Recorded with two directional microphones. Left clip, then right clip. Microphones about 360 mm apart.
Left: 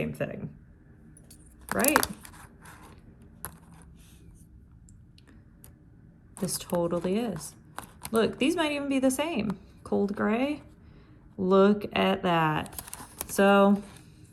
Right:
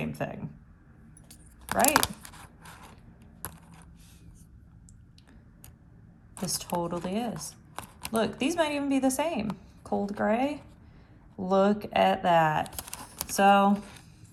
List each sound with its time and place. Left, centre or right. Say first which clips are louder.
0.0 s speech: left 2 dB; centre
1.6 s zipper: right 1 dB; centre
3.4 s coin: right 1 dB; centre
6.3 s speech: left 1 dB; centre